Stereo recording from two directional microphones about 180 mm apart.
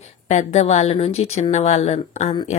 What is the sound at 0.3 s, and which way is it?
Speech, 40° left (ahead or behind).